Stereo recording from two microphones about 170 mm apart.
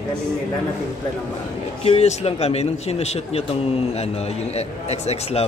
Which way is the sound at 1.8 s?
35° left (ahead or behind).